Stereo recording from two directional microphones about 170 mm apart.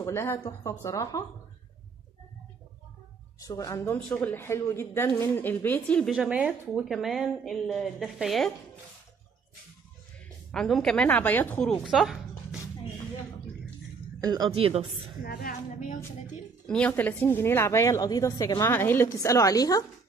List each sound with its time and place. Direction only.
0.0 s a woman's voice: 15° left (ahead or behind)
3.3 s a woman's voice: 20° left (ahead or behind); by 8.5 s centre (ahead or behind)
10.5 s a woman's voice: 5° left (ahead or behind)
14.2 s speech: 20° right (ahead or behind)
14.5 s a woman's voice: 35° right (ahead or behind)
15.2 s speech: 60° left (ahead or behind)
16.6 s a woman's voice: 5° left (ahead or behind)